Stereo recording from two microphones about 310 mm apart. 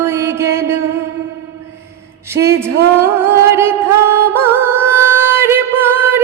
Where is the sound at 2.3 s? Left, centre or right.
Centre.